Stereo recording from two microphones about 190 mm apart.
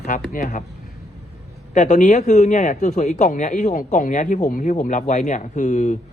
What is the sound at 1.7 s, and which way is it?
Speech, 40° left (ahead or behind).